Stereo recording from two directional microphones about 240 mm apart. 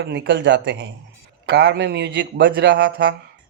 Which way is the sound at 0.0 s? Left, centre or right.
Right.